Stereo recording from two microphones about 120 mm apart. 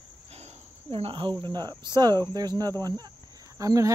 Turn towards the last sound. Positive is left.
turn(degrees=-30)  # may be behind; listen again after turning